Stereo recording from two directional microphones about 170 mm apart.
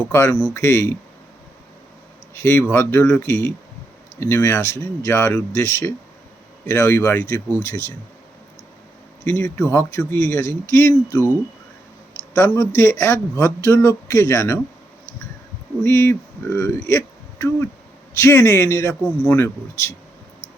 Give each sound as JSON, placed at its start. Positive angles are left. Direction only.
{"t": 0.1, "sound": "speech", "side_deg": 15}
{"t": 2.3, "sound": "speech", "side_deg": 15}
{"t": 9.2, "sound": "speech", "side_deg": 15}
{"t": 12.3, "sound": "speech", "side_deg": 15}
{"t": 15.8, "sound": "speech", "side_deg": 15}